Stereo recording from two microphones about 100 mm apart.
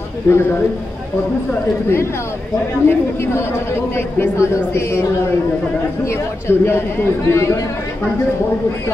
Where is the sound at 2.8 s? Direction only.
25° left (ahead or behind).